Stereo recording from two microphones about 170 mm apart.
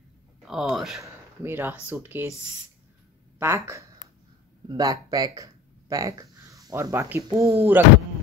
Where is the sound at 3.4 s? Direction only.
15° right (ahead or behind).